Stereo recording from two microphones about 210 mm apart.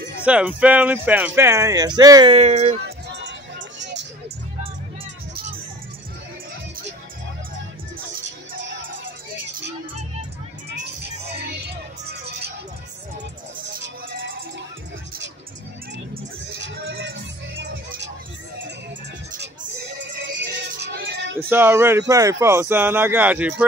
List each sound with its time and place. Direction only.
0.2 s speech: 5° right (ahead or behind); by 2.8 s 30° right (ahead or behind)
2.8 s music: 55° right (ahead or behind)
10.7 s music: 50° right (ahead or behind)
16.4 s music: 50° right (ahead or behind)
20.2 s music: 60° right (ahead or behind)
21.5 s speech: 10° right (ahead or behind)